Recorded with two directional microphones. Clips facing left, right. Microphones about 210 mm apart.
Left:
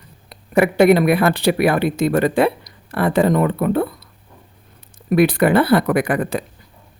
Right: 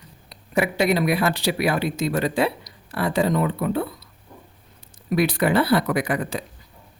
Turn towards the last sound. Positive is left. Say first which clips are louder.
# left 5 dB
turn(degrees=55)  # may be behind; listen again after turning